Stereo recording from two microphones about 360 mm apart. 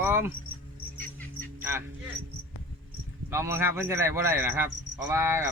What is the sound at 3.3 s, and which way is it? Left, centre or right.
Speech, centre.